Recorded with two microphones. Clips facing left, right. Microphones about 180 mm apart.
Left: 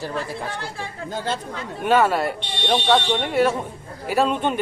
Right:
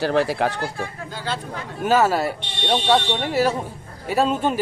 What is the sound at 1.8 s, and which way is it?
A man's voice, centre (ahead or behind).